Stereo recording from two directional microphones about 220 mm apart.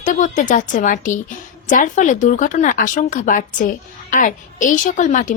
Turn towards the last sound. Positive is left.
turn(degrees=35)  # may be behind; listen again after turning